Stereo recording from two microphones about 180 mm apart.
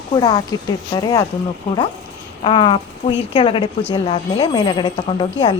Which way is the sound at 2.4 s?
25° left (ahead or behind).